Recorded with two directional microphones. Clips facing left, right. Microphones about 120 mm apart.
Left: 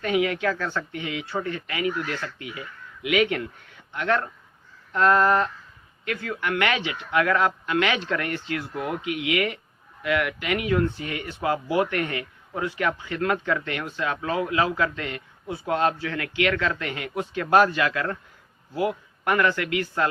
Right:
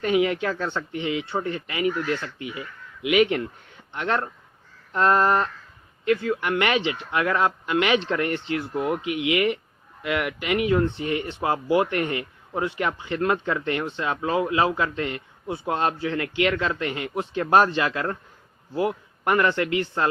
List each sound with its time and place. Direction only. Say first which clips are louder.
0.0 s speech: right 2 dB; 25° right (ahead or behind)
19.3 s speech: right 1 dB; 25° right (ahead or behind)